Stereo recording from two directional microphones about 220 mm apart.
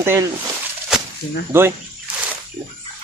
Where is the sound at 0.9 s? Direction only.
5° right (ahead or behind).